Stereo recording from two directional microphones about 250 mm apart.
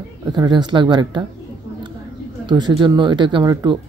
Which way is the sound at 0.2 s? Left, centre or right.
Centre.